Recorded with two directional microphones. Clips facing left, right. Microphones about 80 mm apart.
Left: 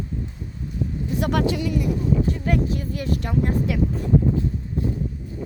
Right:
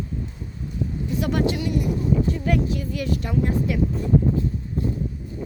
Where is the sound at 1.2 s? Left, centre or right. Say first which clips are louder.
Left 1 dB; left.